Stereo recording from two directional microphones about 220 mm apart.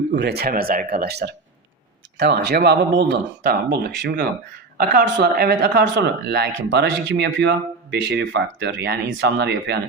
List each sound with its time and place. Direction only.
0.1 s speech: 50° right (ahead or behind)